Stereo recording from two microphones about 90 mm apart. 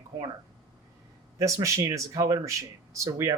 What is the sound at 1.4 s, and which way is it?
Speech, 35° right (ahead or behind).